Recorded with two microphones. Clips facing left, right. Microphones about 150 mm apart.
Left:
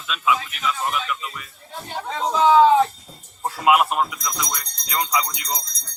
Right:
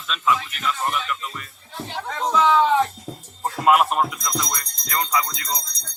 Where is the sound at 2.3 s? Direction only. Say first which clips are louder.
Left 4 dB; 35° left (ahead or behind).